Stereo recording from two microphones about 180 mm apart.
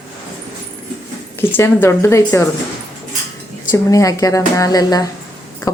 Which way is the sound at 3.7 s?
15° left (ahead or behind).